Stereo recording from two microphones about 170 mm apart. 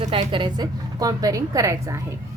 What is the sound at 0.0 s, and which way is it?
A woman's voice, 30° right (ahead or behind).